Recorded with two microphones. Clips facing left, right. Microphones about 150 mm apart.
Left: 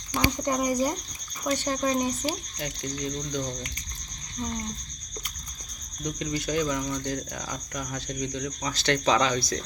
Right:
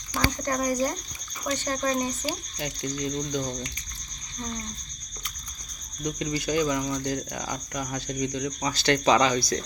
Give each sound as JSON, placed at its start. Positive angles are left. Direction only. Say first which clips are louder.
{"t": 0.2, "sound": "speech", "louder": "left 1 dB", "side_deg": 15}
{"t": 2.2, "sound": "speech", "louder": "left 1 dB", "side_deg": -5}
{"t": 6.1, "sound": "speech", "louder": "right 2 dB", "side_deg": -5}